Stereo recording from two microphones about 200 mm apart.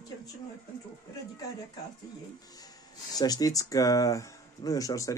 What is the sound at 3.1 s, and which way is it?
Speech, 20° left (ahead or behind).